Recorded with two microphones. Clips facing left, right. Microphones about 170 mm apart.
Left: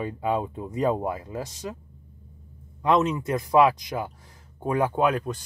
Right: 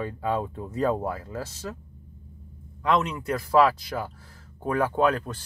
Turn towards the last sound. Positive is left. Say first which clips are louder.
# even
turn(degrees=15)  # may be behind; listen again after turning